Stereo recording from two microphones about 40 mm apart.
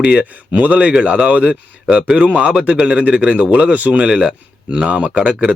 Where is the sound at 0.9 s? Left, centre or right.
Right.